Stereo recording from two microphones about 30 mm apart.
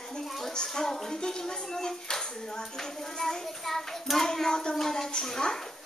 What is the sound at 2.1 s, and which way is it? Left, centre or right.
Clapping, centre.